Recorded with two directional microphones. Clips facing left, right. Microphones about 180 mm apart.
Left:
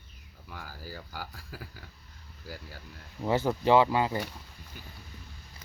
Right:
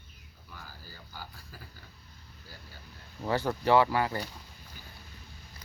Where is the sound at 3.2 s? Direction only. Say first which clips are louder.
Left 3 dB; 20° left (ahead or behind).